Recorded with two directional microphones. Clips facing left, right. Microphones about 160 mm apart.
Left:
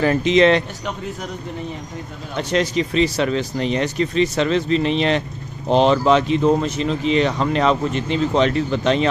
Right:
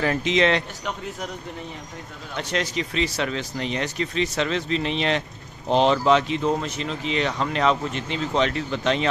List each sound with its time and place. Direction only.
0.0 s speech: 40° left (ahead or behind)
2.3 s speech: 30° left (ahead or behind)
5.7 s speech: 50° left (ahead or behind); by 9.1 s 35° left (ahead or behind)